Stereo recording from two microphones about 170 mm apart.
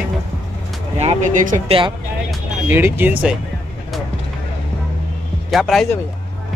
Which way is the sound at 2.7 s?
10° right (ahead or behind).